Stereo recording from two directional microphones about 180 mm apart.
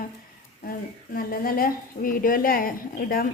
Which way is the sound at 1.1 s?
55° left (ahead or behind).